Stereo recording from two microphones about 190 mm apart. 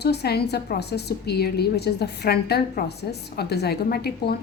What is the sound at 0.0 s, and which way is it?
A woman's voice, 60° left (ahead or behind).